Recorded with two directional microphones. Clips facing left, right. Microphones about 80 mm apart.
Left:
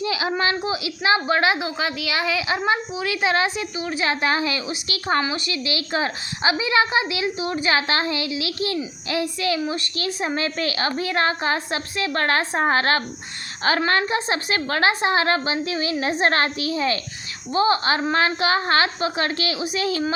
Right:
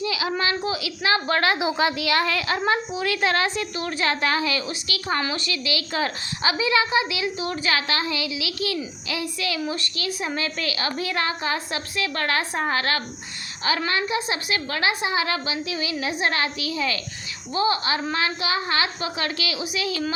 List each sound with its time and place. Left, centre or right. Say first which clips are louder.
0.0 s a woman's voice: left 2 dB; left
1.5 s a woman's voice: right 3 dB; centre; by 20.1 s left